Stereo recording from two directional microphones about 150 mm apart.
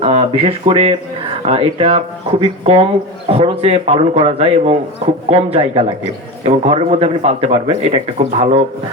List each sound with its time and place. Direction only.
0.0 s a man's voice: 40° right (ahead or behind)